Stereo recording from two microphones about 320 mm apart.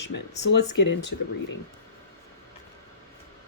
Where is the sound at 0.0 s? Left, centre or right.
Left.